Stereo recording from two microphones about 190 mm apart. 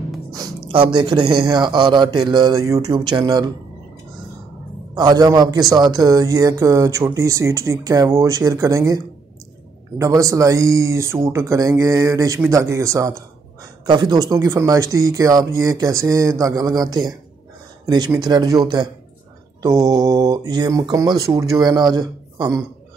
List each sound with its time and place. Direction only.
0.3 s a man's voice: 25° right (ahead or behind)
4.9 s a man's voice: 20° right (ahead or behind)